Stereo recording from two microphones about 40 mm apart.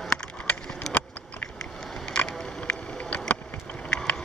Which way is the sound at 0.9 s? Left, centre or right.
Centre.